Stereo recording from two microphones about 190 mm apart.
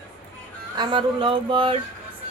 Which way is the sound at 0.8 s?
25° right (ahead or behind).